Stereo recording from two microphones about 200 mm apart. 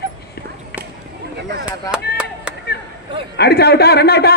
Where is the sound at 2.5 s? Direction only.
5° right (ahead or behind).